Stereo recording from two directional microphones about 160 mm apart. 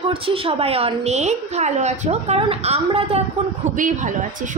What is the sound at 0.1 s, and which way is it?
A woman's voice, 35° right (ahead or behind).